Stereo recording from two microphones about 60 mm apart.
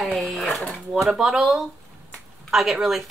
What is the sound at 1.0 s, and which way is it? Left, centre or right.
Speech, centre.